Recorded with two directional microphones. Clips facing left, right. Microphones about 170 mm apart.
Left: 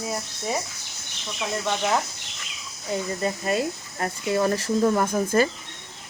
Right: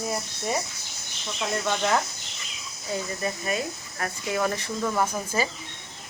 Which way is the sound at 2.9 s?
30° left (ahead or behind).